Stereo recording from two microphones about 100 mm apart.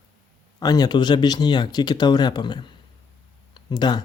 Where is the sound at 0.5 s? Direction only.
40° left (ahead or behind).